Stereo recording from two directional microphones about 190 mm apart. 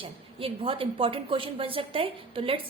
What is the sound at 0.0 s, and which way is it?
A woman's voice, 30° right (ahead or behind).